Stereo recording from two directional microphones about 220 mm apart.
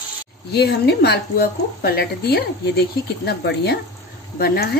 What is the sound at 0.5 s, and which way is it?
A woman's voice, 50° left (ahead or behind).